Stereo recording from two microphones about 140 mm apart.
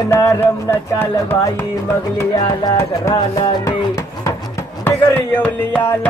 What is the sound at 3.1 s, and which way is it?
Music, 30° left (ahead or behind).